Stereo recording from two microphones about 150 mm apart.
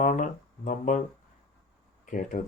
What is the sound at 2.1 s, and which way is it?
Speech, 60° left (ahead or behind).